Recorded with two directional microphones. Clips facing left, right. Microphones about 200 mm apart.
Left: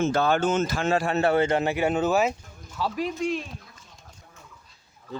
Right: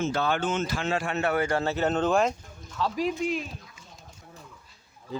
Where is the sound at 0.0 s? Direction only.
45° left (ahead or behind); by 3.4 s centre (ahead or behind).